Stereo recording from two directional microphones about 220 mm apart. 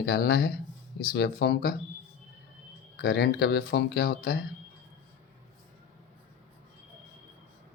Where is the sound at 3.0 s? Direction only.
45° left (ahead or behind).